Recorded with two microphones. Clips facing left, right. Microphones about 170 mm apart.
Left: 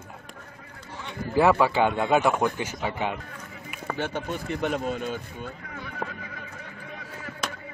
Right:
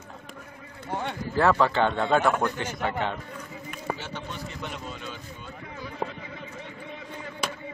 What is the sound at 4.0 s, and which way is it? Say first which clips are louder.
A man's voice: left 7 dB; 50° left (ahead or behind).